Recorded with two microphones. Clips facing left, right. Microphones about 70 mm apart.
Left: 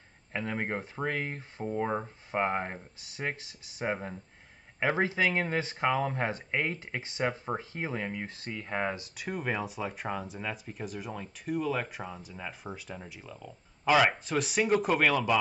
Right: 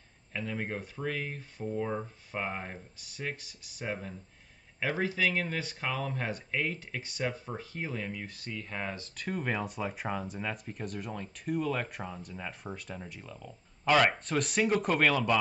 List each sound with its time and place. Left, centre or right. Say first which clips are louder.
0.4 s speech: left 3 dB; left
3.2 s speech: left 3 dB; left; by 15.3 s centre